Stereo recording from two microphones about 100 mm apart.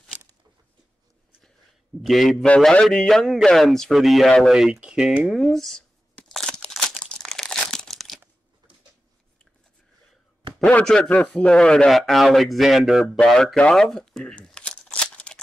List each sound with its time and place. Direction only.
2.0 s speech: centre (ahead or behind)
2.3 s a man's voice: 15° left (ahead or behind); by 5.3 s 10° right (ahead or behind)
5.3 s crumpling: centre (ahead or behind)
10.6 s a man's voice: 10° left (ahead or behind)
13.8 s a sound: 5° left (ahead or behind)